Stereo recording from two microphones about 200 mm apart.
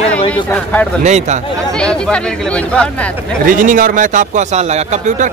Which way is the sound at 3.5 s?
45° right (ahead or behind).